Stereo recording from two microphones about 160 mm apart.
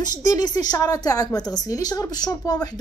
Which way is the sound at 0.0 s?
25° left (ahead or behind).